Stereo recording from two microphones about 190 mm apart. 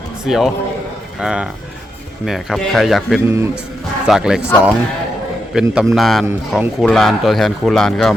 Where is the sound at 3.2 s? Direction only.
15° right (ahead or behind).